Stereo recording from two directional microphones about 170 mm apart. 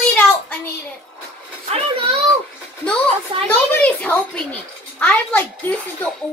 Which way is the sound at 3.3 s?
30° right (ahead or behind).